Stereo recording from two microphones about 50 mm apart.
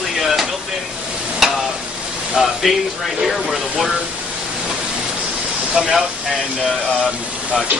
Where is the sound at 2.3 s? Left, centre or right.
Centre.